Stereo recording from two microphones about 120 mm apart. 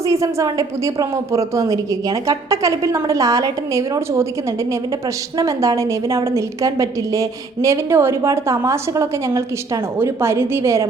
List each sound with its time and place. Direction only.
0.0 s a woman's voice: 25° right (ahead or behind)
5.4 s a woman's voice: 25° right (ahead or behind)